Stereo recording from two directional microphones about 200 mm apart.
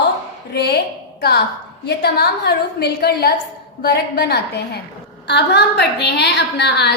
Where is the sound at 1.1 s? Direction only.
55° left (ahead or behind).